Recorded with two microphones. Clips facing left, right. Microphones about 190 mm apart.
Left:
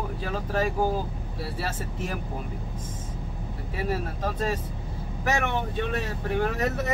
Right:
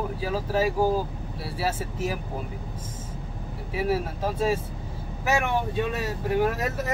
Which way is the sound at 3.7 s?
10° right (ahead or behind).